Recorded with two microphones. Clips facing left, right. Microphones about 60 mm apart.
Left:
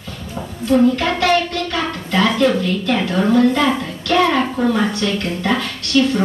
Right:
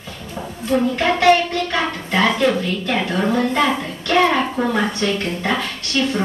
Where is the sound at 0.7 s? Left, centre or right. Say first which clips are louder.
Left 3 dB; right.